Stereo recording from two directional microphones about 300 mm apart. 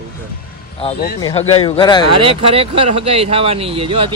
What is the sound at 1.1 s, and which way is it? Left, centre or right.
Speech, centre.